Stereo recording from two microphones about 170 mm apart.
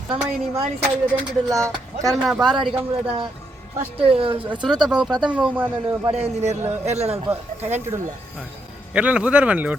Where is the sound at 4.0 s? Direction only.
35° right (ahead or behind).